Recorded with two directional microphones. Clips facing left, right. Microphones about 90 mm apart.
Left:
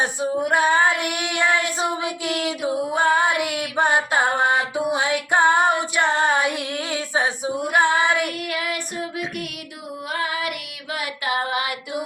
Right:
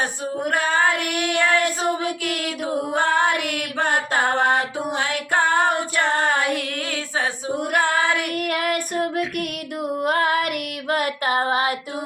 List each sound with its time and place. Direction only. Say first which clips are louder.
0.5 s child singing: left 2 dB; 15° left (ahead or behind)
2.2 s female singing: left 2 dB; 15° left (ahead or behind)
4.5 s music: left 1 dB; 15° left (ahead or behind)
6.0 s female singing: left 1 dB; 15° left (ahead or behind)
7.5 s female singing: even; 55° right (ahead or behind)
7.8 s child singing: left 3 dB; 20° left (ahead or behind)
8.4 s female singing: right 4 dB; 50° right (ahead or behind)
10.0 s child singing: right 5 dB; 50° right (ahead or behind)